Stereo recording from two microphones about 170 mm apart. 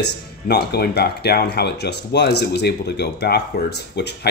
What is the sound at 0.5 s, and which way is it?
Speech, 70° left (ahead or behind).